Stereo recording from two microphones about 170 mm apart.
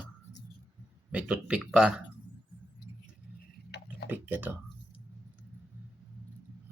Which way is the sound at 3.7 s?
85° left.